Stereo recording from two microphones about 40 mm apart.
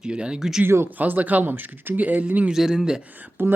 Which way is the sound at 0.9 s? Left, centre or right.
Right.